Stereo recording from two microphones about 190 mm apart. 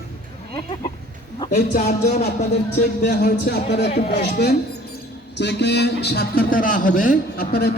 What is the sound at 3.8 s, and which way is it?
Music, 35° left (ahead or behind).